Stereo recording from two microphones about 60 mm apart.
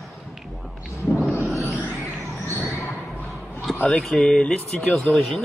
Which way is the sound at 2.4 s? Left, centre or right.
Right.